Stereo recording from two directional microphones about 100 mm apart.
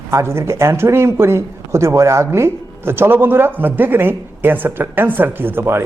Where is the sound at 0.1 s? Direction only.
25° right (ahead or behind).